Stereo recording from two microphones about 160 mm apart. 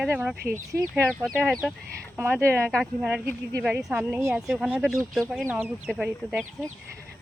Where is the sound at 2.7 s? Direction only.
Centre (ahead or behind).